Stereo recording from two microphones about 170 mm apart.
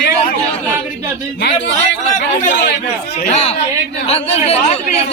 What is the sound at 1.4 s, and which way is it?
Speech, 85° left.